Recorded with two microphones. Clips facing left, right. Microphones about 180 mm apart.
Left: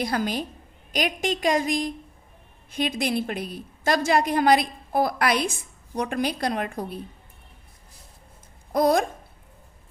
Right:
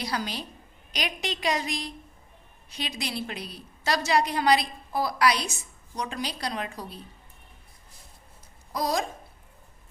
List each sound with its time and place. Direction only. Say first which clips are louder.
0.0 s a woman's voice: left 6 dB; 50° left (ahead or behind)
8.7 s speech: left 8 dB; 55° left (ahead or behind)